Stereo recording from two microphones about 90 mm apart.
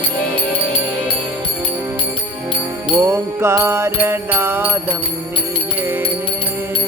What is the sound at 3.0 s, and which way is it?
Music, 30° right (ahead or behind).